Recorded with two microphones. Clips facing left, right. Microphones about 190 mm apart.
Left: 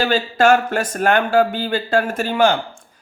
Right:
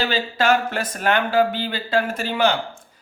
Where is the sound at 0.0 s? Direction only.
50° left (ahead or behind).